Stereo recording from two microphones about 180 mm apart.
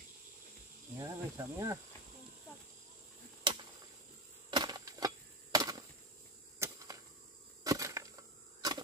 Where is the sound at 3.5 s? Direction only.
25° right (ahead or behind).